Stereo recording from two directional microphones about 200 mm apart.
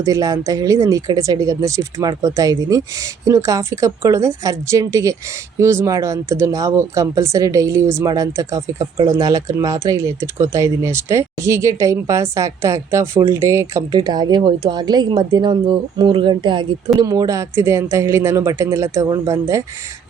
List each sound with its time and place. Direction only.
0.0 s speech: 15° right (ahead or behind)